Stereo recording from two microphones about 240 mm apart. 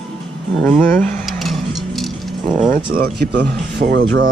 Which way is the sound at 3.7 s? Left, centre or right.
Right.